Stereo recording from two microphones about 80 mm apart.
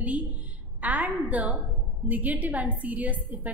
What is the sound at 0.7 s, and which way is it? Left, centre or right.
A woman's voice, centre.